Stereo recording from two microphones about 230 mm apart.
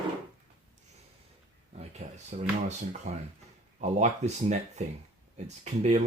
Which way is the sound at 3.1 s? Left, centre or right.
Right.